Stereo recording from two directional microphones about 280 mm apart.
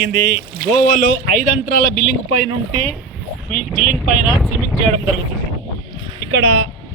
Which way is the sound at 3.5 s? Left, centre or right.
Centre.